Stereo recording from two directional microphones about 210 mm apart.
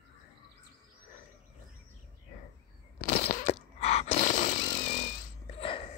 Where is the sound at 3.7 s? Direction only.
30° left (ahead or behind).